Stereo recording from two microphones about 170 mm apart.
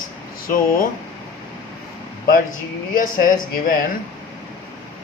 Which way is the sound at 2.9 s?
50° left (ahead or behind).